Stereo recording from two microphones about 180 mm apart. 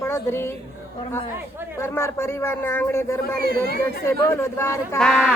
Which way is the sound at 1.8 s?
15° left (ahead or behind).